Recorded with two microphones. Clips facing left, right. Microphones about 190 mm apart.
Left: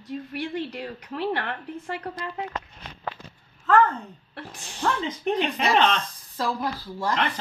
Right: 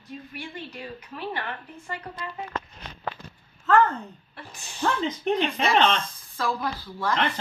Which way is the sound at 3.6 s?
Centre (ahead or behind).